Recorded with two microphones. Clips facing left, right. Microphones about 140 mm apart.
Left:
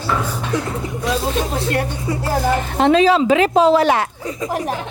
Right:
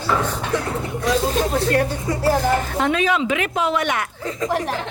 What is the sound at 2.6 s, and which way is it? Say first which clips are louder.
A woman's voice: left 6 dB; 20° left (ahead or behind).